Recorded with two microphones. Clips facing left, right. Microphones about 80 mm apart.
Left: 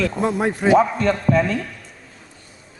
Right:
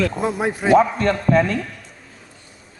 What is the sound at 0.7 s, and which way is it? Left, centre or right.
Speech, right.